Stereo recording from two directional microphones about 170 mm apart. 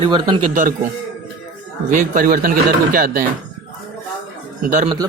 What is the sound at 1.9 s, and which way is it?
Speech, 50° right (ahead or behind).